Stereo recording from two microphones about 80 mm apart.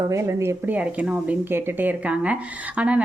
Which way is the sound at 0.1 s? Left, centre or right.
Right.